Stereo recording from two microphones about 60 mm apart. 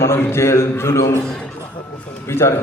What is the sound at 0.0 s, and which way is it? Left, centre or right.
A man's voice, left.